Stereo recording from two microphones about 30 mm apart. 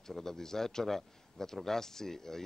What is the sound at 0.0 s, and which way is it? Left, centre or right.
Speech, centre.